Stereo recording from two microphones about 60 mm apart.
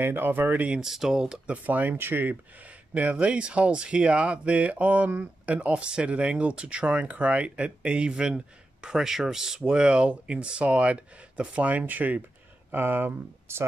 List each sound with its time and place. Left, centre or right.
0.0 s speech: right
0.7 s speech: centre
1.5 s speech: right
2.9 s speech: right